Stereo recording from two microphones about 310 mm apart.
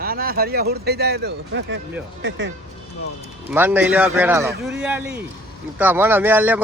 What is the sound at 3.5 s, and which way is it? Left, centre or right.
Speech, centre.